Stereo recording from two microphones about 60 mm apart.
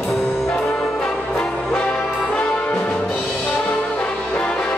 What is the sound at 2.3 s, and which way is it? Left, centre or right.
Brass instrument, centre.